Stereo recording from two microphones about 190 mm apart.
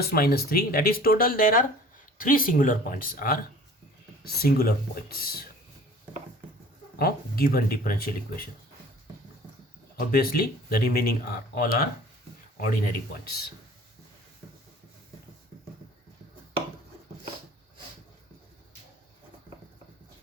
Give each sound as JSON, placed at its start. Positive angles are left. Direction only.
{"t": 0.0, "sound": "speech", "side_deg": 55}
{"t": 4.4, "sound": "speech", "side_deg": 50}
{"t": 7.0, "sound": "speech", "side_deg": 50}
{"t": 10.1, "sound": "speech", "side_deg": 50}